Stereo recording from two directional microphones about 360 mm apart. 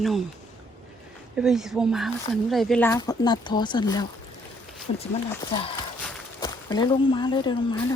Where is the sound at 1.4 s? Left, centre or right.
Centre.